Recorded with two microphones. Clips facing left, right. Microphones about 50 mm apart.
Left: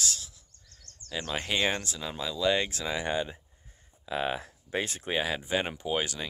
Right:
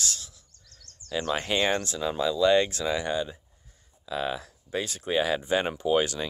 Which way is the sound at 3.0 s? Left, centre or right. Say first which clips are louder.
Right 2 dB; left.